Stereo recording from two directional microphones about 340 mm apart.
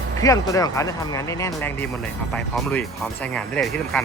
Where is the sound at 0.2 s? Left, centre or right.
Centre.